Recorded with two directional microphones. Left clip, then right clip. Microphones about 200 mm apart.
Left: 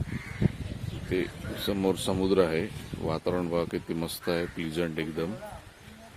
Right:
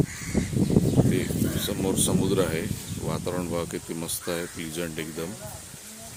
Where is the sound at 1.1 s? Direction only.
20° left (ahead or behind).